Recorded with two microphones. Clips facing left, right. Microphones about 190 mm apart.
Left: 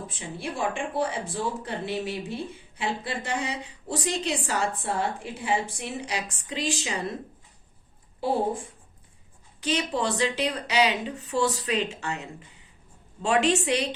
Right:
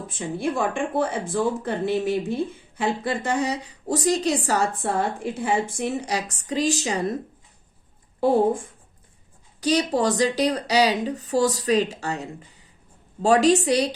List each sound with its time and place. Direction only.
0.1 s speech: 50° right (ahead or behind)
9.6 s a woman's voice: 40° right (ahead or behind)